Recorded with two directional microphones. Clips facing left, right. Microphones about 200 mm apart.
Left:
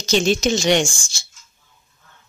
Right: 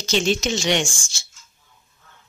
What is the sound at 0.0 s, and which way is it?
Speech, 40° left (ahead or behind).